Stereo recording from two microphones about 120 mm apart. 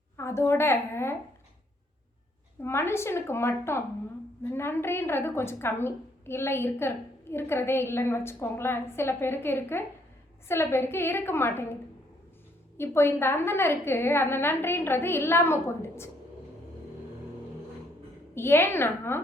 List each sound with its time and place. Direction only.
0.2 s a woman's voice: 20° left (ahead or behind)
2.6 s a woman's voice: 20° left (ahead or behind)
18.3 s a woman's voice: 20° left (ahead or behind)